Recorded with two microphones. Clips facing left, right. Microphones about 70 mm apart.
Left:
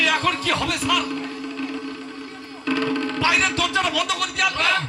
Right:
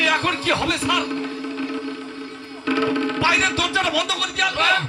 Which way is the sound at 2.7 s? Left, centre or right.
Centre.